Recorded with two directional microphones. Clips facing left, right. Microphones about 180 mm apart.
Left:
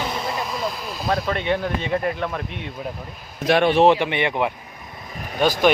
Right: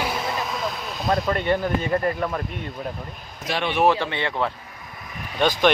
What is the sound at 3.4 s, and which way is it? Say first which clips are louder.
Speech: left 9 dB; 55° left (ahead or behind).